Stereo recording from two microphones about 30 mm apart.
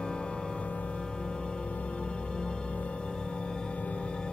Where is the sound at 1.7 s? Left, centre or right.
Left.